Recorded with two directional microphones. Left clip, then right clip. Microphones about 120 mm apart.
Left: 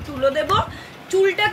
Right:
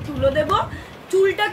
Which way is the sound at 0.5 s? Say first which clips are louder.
Even; 35° right (ahead or behind).